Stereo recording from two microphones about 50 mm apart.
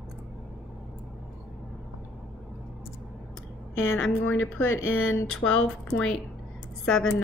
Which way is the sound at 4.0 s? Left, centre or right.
Left.